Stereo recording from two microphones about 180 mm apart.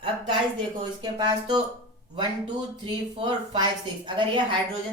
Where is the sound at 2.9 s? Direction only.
25° right (ahead or behind).